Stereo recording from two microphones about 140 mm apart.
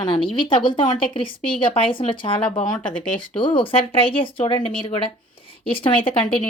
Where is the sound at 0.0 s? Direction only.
35° left (ahead or behind).